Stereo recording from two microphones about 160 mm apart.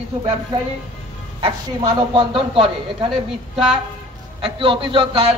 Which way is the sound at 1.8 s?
30° right (ahead or behind).